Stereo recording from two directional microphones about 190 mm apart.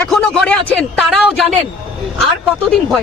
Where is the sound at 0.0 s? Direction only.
5° left (ahead or behind).